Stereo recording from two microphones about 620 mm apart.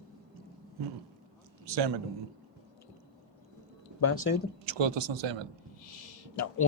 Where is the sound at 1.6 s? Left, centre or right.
Right.